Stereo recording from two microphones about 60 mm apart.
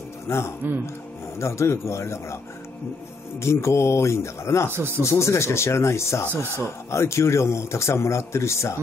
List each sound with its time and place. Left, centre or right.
0.3 s speech: left
3.3 s speech: left
4.6 s speech: right
5.0 s speech: left